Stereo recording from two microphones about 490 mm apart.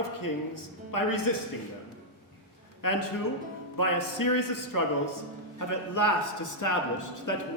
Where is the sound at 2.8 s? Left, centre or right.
Left.